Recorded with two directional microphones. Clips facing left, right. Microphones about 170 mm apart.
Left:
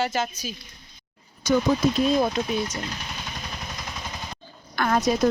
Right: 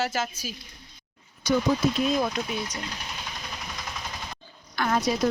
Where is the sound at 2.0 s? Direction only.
30° left (ahead or behind).